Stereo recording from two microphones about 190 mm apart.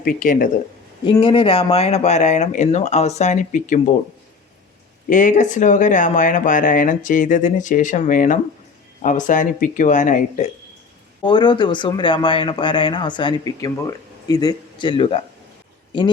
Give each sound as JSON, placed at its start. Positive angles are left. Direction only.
{"t": 0.0, "sound": "speech", "side_deg": 50}
{"t": 1.0, "sound": "speech", "side_deg": 25}
{"t": 5.0, "sound": "speech", "side_deg": 45}
{"t": 11.2, "sound": "speech", "side_deg": 25}